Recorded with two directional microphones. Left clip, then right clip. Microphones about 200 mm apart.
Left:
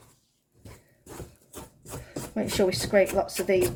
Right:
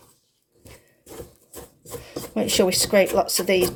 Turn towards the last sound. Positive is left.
turn(degrees=-45)  # may be behind; listen again after turning